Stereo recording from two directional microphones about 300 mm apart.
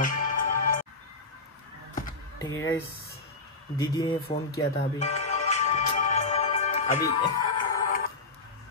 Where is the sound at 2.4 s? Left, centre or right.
Centre.